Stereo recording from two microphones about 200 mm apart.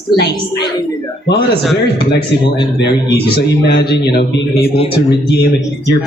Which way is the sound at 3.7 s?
55° left (ahead or behind).